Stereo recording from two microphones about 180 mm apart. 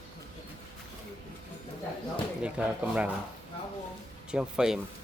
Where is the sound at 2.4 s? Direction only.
5° right (ahead or behind).